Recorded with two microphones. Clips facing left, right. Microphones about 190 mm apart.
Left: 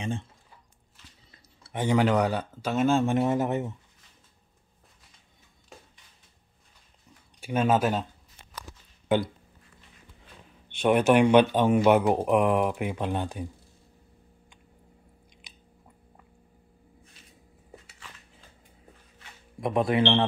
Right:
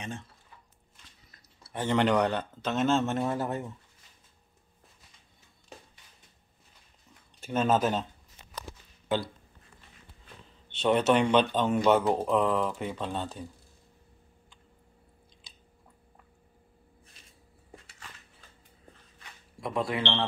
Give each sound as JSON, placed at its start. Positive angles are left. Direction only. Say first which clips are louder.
{"t": 0.0, "sound": "a sound", "louder": "left 7 dB", "side_deg": 30}
{"t": 1.3, "sound": "speech", "louder": "left 3 dB", "side_deg": 20}
{"t": 5.7, "sound": "a sound", "louder": "right 1 dB", "side_deg": 0}
{"t": 7.3, "sound": "speech", "louder": "left 2 dB", "side_deg": 10}
{"t": 10.7, "sound": "speech", "louder": "left 3 dB", "side_deg": 10}
{"t": 19.6, "sound": "speech", "louder": "left 7 dB", "side_deg": 20}